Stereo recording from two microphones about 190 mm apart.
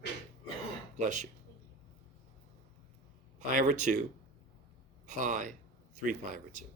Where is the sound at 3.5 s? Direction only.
40° right (ahead or behind).